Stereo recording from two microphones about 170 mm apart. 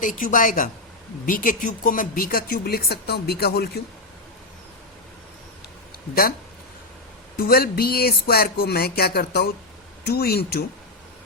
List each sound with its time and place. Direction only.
0.0 s a woman's voice: 50° left (ahead or behind); by 3.7 s 65° left (ahead or behind)
7.4 s speech: 65° left (ahead or behind)